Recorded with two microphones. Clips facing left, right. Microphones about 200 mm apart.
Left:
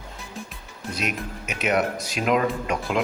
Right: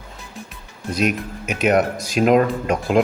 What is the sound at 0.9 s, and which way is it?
Speech, 40° right (ahead or behind).